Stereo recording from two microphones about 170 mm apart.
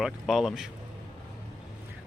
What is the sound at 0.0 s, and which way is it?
Speech, centre (ahead or behind).